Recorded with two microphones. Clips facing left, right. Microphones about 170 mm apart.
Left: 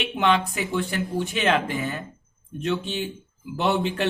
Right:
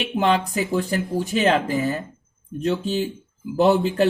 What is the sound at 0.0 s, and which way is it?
Speech, 40° right (ahead or behind).